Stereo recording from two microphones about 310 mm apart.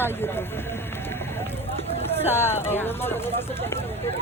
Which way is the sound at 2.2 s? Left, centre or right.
Centre.